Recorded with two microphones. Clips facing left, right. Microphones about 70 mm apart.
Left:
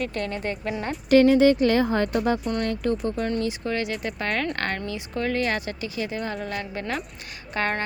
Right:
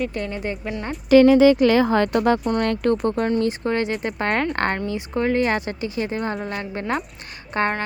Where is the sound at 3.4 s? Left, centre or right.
Right.